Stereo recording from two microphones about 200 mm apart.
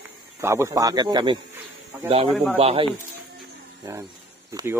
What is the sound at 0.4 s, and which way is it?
Speech, 15° right (ahead or behind).